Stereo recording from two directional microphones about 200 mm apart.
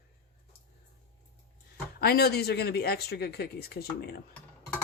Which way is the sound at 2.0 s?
50° left (ahead or behind).